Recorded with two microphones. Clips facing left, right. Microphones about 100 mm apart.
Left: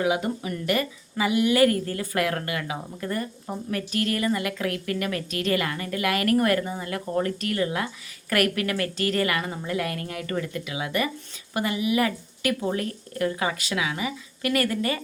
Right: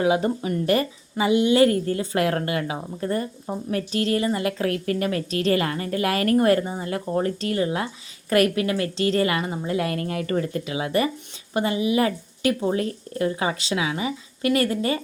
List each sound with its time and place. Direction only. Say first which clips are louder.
0.0 s a woman's voice: right 4 dB; 30° right (ahead or behind)